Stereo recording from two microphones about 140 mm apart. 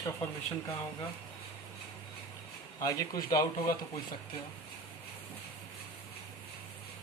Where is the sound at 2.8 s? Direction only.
25° left (ahead or behind).